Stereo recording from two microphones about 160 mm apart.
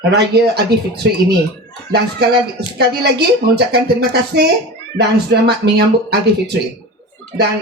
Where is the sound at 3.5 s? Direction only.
90° right.